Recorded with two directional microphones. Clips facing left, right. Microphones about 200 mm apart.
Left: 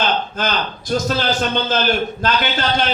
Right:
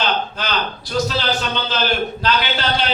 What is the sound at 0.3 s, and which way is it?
A man's voice, 45° left (ahead or behind).